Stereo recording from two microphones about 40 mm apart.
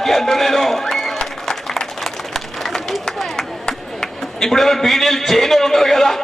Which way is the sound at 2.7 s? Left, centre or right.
Centre.